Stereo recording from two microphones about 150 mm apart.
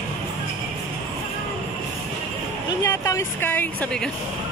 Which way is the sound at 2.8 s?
20° left (ahead or behind).